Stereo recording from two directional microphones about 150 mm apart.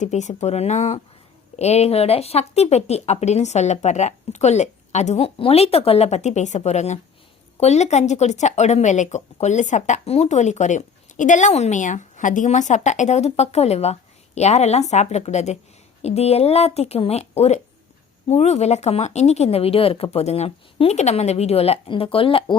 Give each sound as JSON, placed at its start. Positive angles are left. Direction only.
{"t": 0.0, "sound": "speech", "side_deg": 50}